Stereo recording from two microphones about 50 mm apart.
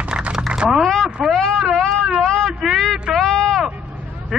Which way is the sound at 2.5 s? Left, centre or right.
Centre.